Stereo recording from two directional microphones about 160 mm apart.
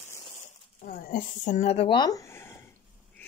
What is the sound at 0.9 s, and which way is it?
Speech, 60° left (ahead or behind).